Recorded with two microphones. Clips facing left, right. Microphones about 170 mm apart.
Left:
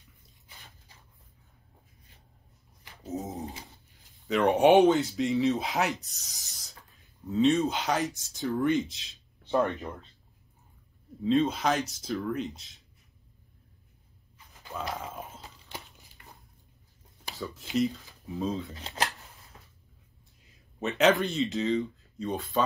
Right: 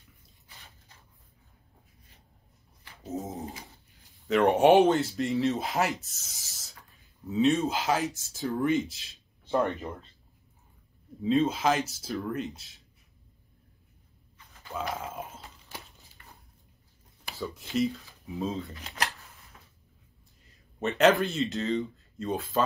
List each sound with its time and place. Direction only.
2.9 s a sound: centre (ahead or behind)
4.3 s speech: centre (ahead or behind)
11.2 s speech: 5° right (ahead or behind)
14.7 s a sound: centre (ahead or behind)
15.4 s crumpling: 20° left (ahead or behind)
18.3 s speech: centre (ahead or behind)
18.8 s speech: 30° left (ahead or behind)
20.4 s a sound: centre (ahead or behind)
21.0 s speech: centre (ahead or behind)